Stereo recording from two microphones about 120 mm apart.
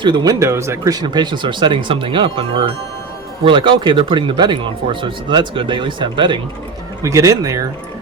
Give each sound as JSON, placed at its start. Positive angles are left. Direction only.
{"t": 0.0, "sound": "speech", "side_deg": -40}
{"t": 0.3, "sound": "speech", "side_deg": -25}
{"t": 7.0, "sound": "speech", "side_deg": -25}